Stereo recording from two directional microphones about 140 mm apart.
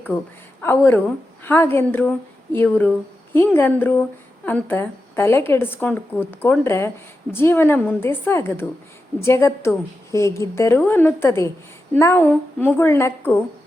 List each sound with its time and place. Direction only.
0.6 s a woman's voice: 15° left (ahead or behind)